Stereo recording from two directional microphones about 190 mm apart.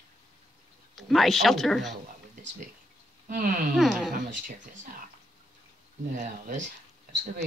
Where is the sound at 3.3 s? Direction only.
50° right (ahead or behind).